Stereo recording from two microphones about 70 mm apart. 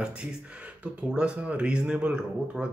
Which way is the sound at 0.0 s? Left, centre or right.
Centre.